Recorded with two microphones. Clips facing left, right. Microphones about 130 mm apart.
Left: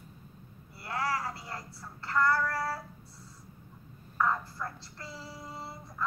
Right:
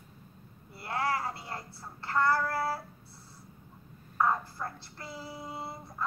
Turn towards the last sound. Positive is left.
turn(degrees=-25)  # may be behind; listen again after turning